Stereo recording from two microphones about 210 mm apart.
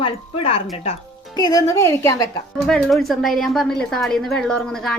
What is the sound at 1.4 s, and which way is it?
Speech, 15° left (ahead or behind).